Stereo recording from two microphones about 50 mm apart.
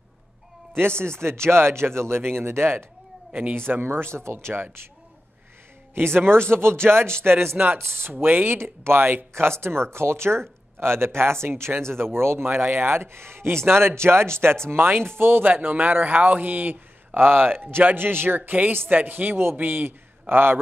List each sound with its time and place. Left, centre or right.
0.7 s speech: right
5.9 s speech: right
7.5 s speech: right
9.3 s speech: right
12.5 s speech: right
14.7 s a man's voice: right